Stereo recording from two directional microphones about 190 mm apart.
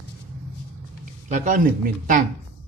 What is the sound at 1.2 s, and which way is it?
Speech, 40° right (ahead or behind).